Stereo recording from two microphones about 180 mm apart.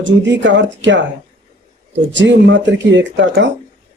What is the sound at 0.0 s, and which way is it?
Speech, 90° right.